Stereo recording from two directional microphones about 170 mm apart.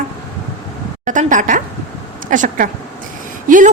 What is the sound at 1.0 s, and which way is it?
A woman's voice, 50° right (ahead or behind).